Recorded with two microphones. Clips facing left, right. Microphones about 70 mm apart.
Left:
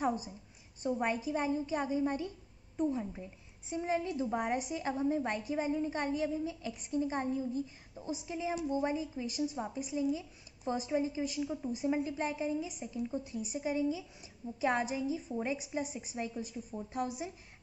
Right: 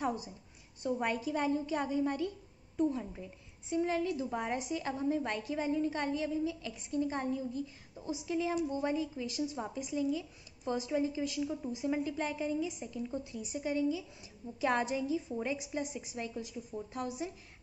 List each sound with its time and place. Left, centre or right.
0.0 s a sound: left
0.9 s a woman's voice: centre
10.1 s a woman's voice: centre